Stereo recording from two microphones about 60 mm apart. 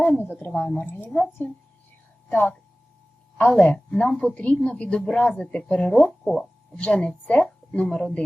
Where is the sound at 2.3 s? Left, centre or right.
Left.